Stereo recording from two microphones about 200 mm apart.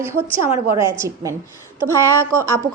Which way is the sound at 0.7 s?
15° right (ahead or behind).